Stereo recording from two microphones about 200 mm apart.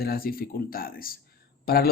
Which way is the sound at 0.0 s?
50° left (ahead or behind).